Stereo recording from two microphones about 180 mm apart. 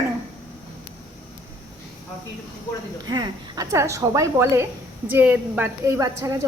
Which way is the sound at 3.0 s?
20° right (ahead or behind).